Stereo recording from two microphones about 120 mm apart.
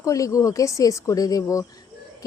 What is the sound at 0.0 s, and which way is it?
A woman's voice, 30° left (ahead or behind).